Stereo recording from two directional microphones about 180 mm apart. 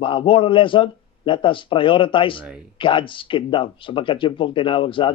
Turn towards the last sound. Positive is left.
turn(degrees=30)  # may be behind; listen again after turning